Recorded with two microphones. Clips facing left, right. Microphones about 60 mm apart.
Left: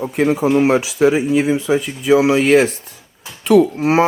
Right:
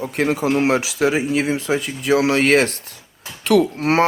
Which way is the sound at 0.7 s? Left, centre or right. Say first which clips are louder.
Left 4 dB; right.